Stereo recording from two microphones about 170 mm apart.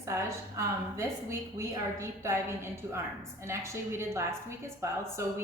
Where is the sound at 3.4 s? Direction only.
15° right (ahead or behind).